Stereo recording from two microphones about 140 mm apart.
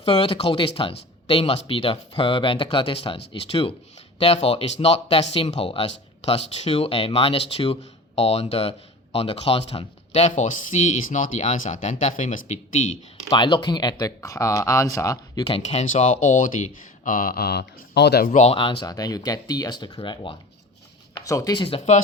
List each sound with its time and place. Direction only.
0.0 s speech: 40° left (ahead or behind); by 12.8 s 60° left (ahead or behind)
13.3 s speech: 35° left (ahead or behind)
15.4 s speech: 50° left (ahead or behind); by 18.3 s 90° left
18.3 s speech: 55° left (ahead or behind)
18.6 s speech: 35° left (ahead or behind)